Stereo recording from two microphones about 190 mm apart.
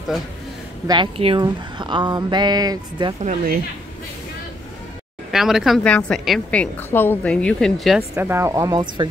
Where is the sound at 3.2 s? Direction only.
40° right (ahead or behind).